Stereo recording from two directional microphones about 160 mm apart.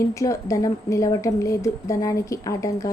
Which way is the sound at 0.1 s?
20° left (ahead or behind).